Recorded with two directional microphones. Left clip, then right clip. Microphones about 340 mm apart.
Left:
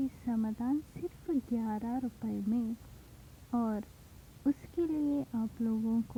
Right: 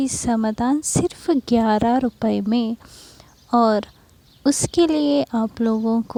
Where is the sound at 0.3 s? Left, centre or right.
Right.